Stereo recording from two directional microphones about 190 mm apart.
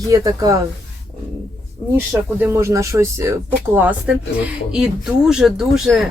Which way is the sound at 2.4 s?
15° right (ahead or behind).